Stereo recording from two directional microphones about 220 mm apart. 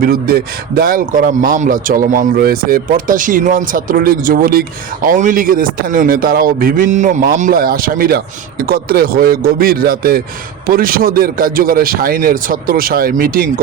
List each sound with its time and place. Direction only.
0.0 s a man's voice: 45° right (ahead or behind)